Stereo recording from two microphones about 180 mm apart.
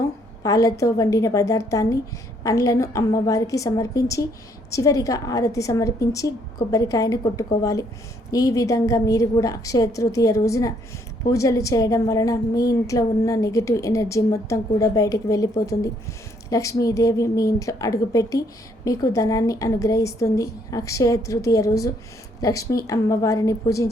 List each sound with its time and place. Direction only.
0.4 s a woman's voice: 20° left (ahead or behind)